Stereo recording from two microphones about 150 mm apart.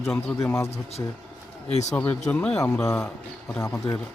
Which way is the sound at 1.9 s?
10° left (ahead or behind).